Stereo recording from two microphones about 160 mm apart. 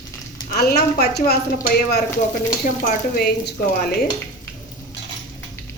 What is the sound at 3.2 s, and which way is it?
Speech, 85° left.